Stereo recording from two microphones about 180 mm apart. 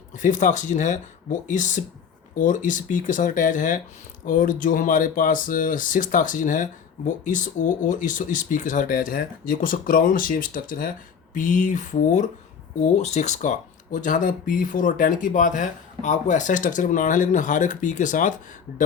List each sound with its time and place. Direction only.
0.2 s speech: 45° left (ahead or behind)